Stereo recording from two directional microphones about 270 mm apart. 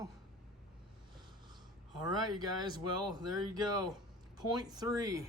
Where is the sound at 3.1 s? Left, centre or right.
Centre.